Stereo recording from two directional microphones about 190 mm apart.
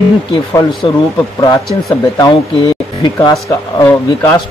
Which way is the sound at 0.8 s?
25° left (ahead or behind).